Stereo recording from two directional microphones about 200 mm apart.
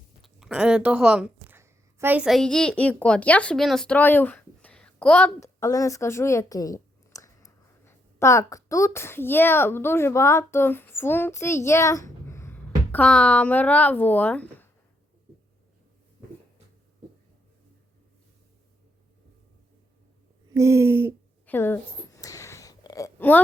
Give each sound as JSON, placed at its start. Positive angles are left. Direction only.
{"t": 0.2, "sound": "speech", "side_deg": 0}
{"t": 20.5, "sound": "speech", "side_deg": -15}
{"t": 21.4, "sound": "a sound", "side_deg": 10}